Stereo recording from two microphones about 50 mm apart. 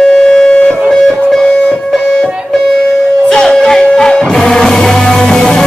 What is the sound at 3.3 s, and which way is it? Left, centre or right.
Music, centre.